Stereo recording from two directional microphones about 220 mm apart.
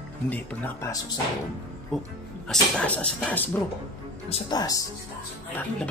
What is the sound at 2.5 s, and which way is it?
Speech, 5° left (ahead or behind).